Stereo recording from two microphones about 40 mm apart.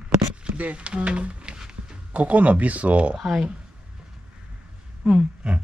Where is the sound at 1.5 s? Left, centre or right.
Centre.